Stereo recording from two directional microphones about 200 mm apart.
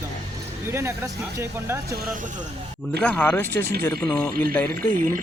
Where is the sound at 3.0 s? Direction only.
5° left (ahead or behind).